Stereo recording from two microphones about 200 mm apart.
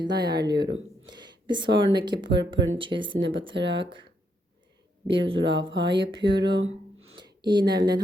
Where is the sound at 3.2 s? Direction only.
70° right (ahead or behind).